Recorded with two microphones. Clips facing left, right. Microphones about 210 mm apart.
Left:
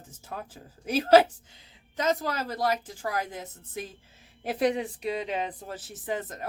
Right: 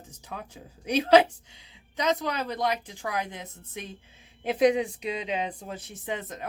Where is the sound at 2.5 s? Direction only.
45° left (ahead or behind).